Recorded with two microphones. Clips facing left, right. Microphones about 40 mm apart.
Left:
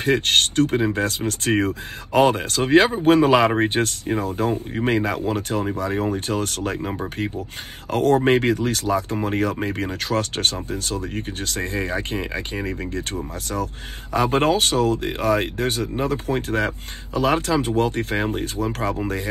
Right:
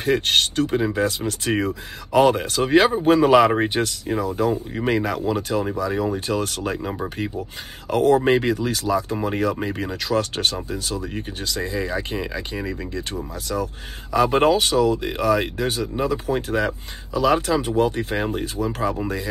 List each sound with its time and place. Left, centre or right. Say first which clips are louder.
0.0 s speech: left 1 dB; left
7.9 s speech: even; left